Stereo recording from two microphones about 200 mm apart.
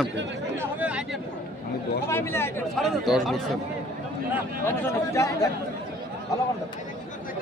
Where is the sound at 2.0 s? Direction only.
10° left (ahead or behind).